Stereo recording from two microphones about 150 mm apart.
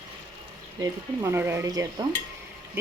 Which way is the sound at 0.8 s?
15° right (ahead or behind).